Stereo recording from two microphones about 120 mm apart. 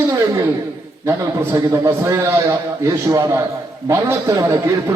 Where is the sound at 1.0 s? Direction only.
25° right (ahead or behind).